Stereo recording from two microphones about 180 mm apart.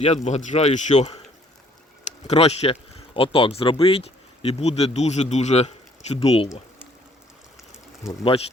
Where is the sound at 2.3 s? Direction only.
35° left (ahead or behind).